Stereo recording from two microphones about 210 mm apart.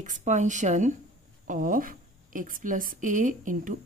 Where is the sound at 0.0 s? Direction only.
35° right (ahead or behind).